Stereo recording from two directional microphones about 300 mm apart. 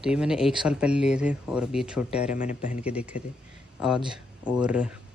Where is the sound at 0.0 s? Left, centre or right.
Centre.